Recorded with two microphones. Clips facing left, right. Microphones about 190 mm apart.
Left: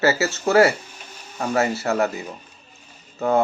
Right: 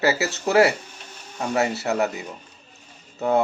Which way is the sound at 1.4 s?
20° right (ahead or behind).